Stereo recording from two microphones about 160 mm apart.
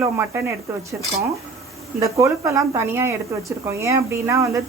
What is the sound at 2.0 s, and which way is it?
Speech, 20° right (ahead or behind).